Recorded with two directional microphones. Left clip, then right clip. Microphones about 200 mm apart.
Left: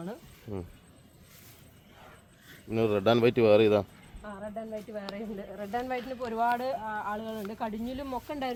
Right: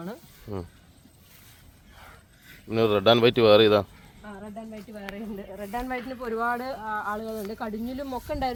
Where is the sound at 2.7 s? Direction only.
Centre (ahead or behind).